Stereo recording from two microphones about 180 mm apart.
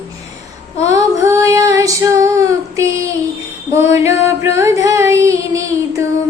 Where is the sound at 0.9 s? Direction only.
20° right (ahead or behind).